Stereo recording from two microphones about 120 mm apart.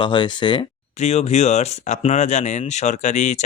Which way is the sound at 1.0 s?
60° left (ahead or behind).